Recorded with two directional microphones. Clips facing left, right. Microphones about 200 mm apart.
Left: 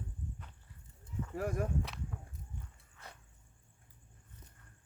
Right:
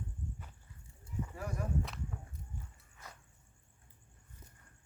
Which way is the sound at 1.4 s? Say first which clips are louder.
Left 8 dB; 55° left (ahead or behind).